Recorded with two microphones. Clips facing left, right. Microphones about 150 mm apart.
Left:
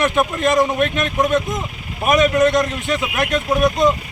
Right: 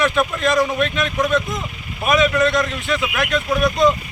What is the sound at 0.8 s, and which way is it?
Speech, 50° left (ahead or behind).